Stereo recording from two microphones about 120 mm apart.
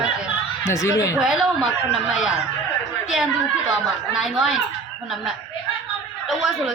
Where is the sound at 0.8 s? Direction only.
25° left (ahead or behind).